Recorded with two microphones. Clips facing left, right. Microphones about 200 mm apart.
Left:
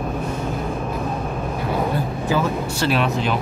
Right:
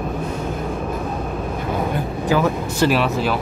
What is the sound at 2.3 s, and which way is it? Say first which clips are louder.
Speech: right 3 dB; 10° right (ahead or behind).